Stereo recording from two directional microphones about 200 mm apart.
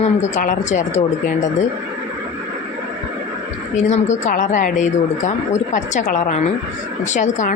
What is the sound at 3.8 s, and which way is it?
Speech, 35° left (ahead or behind).